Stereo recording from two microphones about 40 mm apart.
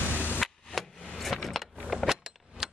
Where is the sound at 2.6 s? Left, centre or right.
Centre.